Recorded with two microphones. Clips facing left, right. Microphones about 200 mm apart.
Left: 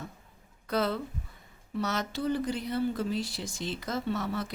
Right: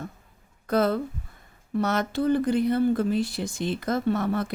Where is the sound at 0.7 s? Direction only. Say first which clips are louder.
Right 6 dB; 50° right (ahead or behind).